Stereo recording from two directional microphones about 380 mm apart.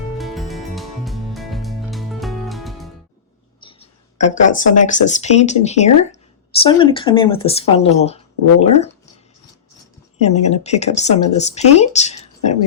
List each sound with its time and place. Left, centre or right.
0.2 s music: centre
3.6 s speech: centre
10.2 s speech: centre